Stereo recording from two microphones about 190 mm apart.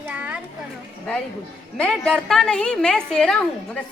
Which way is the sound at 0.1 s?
5° right (ahead or behind).